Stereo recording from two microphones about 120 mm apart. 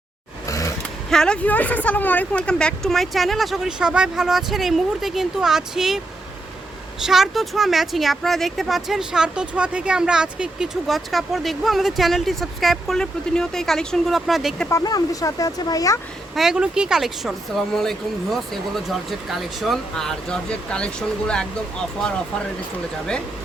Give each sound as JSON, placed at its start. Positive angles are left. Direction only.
{"t": 0.4, "sound": "a sound", "side_deg": 25}
{"t": 1.1, "sound": "speech", "side_deg": 5}
{"t": 7.0, "sound": "speech", "side_deg": -5}
{"t": 14.7, "sound": "speech", "side_deg": 30}
{"t": 16.3, "sound": "speech", "side_deg": -5}